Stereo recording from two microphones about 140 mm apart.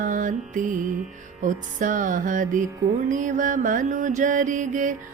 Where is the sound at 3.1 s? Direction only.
65° right (ahead or behind).